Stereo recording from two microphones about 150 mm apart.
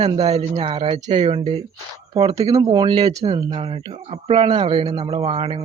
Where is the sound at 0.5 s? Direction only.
40° right (ahead or behind).